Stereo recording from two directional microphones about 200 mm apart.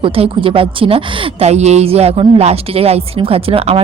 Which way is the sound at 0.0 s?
25° right (ahead or behind).